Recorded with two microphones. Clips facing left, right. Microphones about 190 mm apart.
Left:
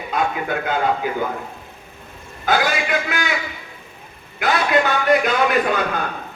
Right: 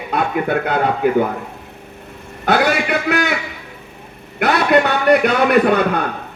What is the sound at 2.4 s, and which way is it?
Speech, 65° right (ahead or behind).